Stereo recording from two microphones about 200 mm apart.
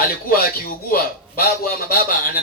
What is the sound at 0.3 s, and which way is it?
A man's voice, 50° left (ahead or behind).